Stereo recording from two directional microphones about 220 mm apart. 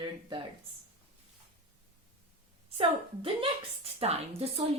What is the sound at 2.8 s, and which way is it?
Speech, 25° right (ahead or behind).